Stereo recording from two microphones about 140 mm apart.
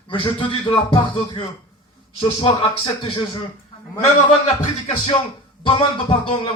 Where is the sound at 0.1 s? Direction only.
35° left (ahead or behind).